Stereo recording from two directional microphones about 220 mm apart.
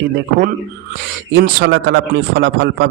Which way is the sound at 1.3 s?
50° right (ahead or behind).